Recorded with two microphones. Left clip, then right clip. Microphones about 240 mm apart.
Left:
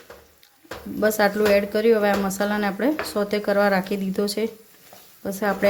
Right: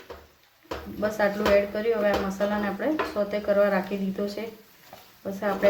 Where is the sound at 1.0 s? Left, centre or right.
Left.